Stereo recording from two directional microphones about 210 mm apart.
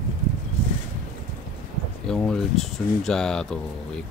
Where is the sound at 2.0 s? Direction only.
5° left (ahead or behind).